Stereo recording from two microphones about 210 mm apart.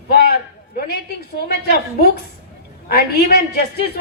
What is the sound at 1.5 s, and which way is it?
A man's voice, 45° left (ahead or behind).